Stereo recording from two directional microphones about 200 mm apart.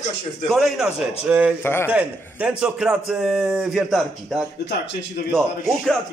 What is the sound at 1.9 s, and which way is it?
A man's voice, 5° right (ahead or behind).